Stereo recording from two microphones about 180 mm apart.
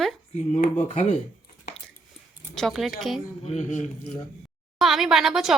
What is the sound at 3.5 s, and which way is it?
Chopping, 40° left (ahead or behind).